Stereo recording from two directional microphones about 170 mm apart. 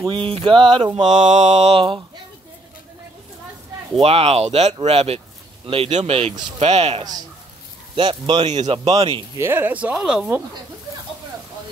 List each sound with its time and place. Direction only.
0.1 s mantra: 30° right (ahead or behind)
0.9 s mantra: 45° right (ahead or behind)
4.0 s mantra: 35° right (ahead or behind)
7.9 s speech: 30° right (ahead or behind)
8.5 s mantra: 40° right (ahead or behind)
9.4 s speech: 15° right (ahead or behind)